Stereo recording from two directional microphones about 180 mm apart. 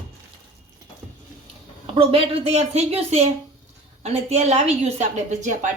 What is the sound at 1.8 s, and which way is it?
A woman's voice, 30° right (ahead or behind).